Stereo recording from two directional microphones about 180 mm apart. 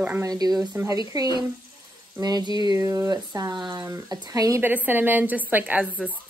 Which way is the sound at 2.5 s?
20° right (ahead or behind).